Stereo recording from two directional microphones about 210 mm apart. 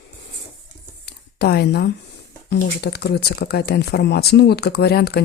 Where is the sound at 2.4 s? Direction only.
50° left (ahead or behind).